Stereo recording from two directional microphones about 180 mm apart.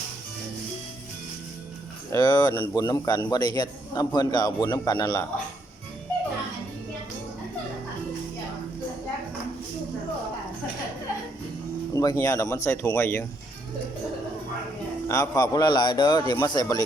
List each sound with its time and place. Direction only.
2.1 s a man's voice: 20° left (ahead or behind)
11.9 s speech: 15° left (ahead or behind)
15.0 s a man's voice: 15° left (ahead or behind)